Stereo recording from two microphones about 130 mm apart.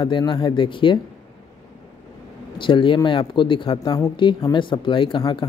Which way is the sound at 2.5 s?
40° left (ahead or behind).